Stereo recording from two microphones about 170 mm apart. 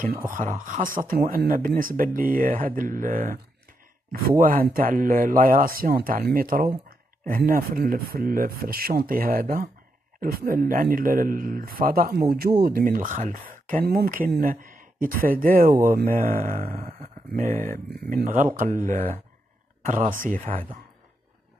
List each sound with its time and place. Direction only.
0.3 s speech: 50° right (ahead or behind)